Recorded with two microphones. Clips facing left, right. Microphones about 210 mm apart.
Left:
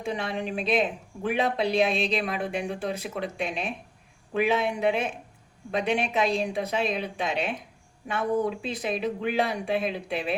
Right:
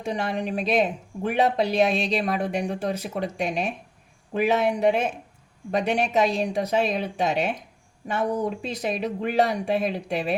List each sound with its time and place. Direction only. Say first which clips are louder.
0.0 s speech: right 3 dB; 40° right (ahead or behind)